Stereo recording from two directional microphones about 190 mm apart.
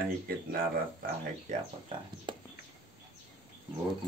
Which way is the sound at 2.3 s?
25° right (ahead or behind).